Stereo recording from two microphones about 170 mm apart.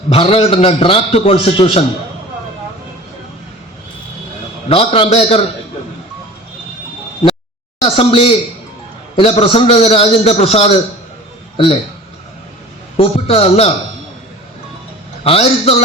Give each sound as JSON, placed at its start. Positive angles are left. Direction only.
{"t": 0.1, "sound": "a man's voice", "side_deg": 35}
{"t": 4.7, "sound": "a man's voice", "side_deg": 35}
{"t": 7.8, "sound": "a man's voice", "side_deg": 30}
{"t": 13.0, "sound": "a man's voice", "side_deg": 35}
{"t": 15.2, "sound": "a man's voice", "side_deg": 35}